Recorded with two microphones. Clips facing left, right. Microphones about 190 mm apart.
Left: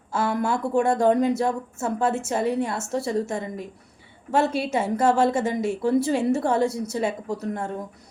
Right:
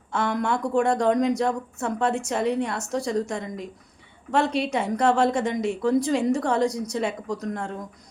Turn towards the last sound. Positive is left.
turn(degrees=5)  # may be behind; listen again after turning